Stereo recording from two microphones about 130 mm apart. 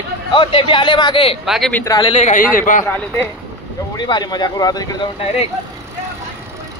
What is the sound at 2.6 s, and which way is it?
Speech, 85° left.